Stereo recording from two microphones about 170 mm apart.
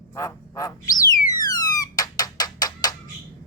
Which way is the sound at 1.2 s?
20° left (ahead or behind).